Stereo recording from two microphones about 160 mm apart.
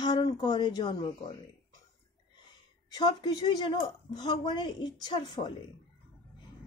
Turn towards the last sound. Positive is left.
turn(degrees=30)  # may be behind; listen again after turning